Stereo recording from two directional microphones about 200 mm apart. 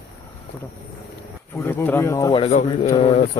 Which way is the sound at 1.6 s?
10° left (ahead or behind).